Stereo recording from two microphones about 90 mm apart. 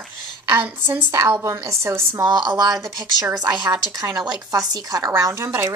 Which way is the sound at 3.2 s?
45° right (ahead or behind).